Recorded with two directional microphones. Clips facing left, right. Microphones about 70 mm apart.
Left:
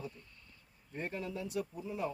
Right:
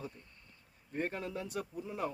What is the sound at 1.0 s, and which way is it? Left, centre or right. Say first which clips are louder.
Speech: right 2 dB; right.